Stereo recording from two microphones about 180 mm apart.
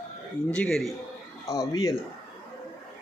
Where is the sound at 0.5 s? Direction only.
5° left (ahead or behind).